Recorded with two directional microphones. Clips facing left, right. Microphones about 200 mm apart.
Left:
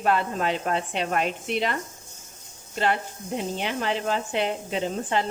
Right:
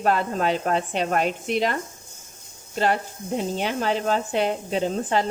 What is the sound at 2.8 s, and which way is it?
A woman's voice, 40° right (ahead or behind).